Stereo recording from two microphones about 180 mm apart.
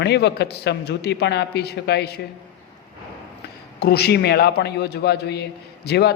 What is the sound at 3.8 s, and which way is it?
A man's voice, 65° left (ahead or behind).